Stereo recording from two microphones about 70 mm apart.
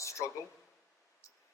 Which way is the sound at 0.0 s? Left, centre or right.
Left.